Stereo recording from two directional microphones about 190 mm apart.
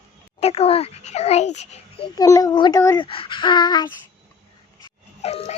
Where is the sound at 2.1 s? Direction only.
15° left (ahead or behind).